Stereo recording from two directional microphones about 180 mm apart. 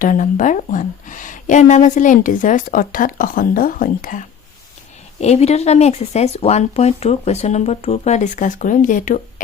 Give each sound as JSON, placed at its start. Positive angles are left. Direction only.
{"t": 0.0, "sound": "speech", "side_deg": 45}
{"t": 5.2, "sound": "speech", "side_deg": 35}